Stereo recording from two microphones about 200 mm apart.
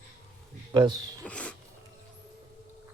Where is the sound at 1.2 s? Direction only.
5° left (ahead or behind).